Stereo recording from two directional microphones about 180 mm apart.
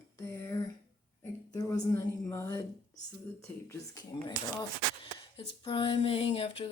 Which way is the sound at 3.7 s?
20° left (ahead or behind).